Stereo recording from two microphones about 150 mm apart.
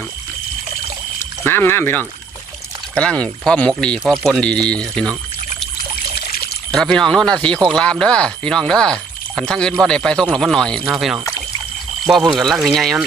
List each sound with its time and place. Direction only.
1.2 s pour: 15° left (ahead or behind)
2.9 s speech: 5° left (ahead or behind)
6.1 s a sound: 90° left
6.7 s speech: 5° left (ahead or behind)
12.3 s speech: centre (ahead or behind)